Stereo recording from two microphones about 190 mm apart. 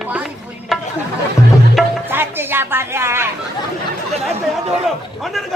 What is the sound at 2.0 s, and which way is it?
Speech, 10° right (ahead or behind).